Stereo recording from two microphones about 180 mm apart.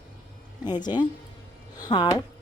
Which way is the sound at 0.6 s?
25° left (ahead or behind).